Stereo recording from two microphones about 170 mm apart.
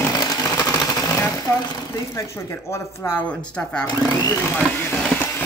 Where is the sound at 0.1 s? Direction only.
20° left (ahead or behind).